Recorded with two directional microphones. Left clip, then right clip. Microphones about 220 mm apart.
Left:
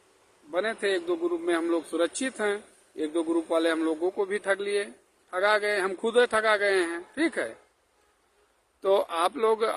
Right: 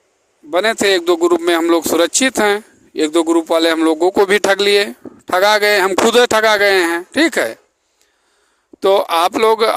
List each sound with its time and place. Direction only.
0.5 s speech: 50° right (ahead or behind)
8.8 s speech: 45° right (ahead or behind)